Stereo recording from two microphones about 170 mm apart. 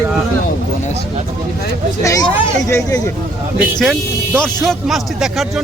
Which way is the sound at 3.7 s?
5° left (ahead or behind).